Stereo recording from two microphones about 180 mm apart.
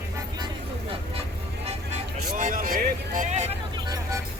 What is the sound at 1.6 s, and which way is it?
Music, 40° right (ahead or behind).